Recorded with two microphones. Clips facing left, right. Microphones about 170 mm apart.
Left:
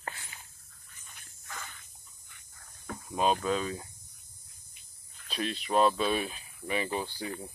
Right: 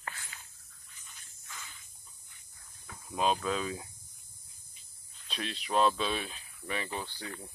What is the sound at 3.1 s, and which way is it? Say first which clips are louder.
Speech: left 2 dB; centre (ahead or behind).